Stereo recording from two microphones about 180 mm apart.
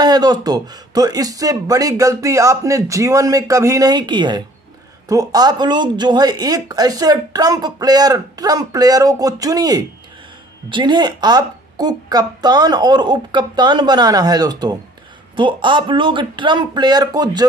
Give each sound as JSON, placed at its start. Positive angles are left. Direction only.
{"t": 0.0, "sound": "speech", "side_deg": -20}